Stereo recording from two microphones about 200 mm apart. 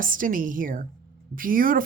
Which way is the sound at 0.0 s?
45° right (ahead or behind).